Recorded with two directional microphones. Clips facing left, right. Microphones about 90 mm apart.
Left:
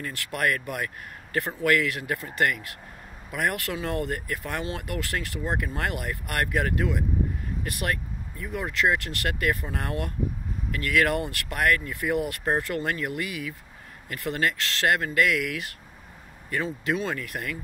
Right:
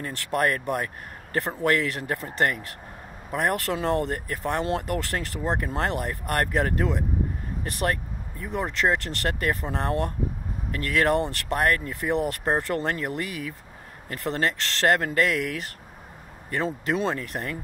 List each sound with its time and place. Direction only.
0.0 s speech: 35° right (ahead or behind)